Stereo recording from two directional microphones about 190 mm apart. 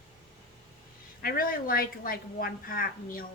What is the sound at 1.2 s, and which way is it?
A woman's voice, 50° left (ahead or behind).